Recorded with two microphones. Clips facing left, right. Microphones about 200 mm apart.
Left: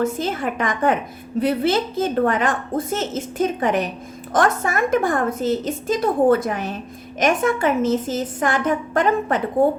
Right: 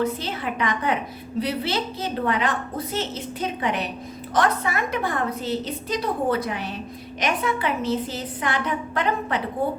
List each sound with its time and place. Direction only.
0.0 s a woman's voice: 45° left (ahead or behind)